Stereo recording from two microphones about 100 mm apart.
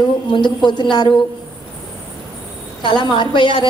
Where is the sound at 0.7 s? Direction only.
50° left (ahead or behind).